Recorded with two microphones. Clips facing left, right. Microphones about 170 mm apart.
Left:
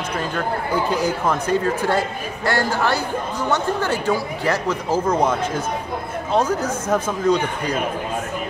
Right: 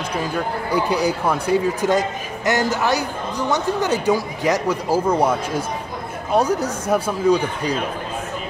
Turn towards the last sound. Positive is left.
turn(degrees=-10)  # may be behind; listen again after turning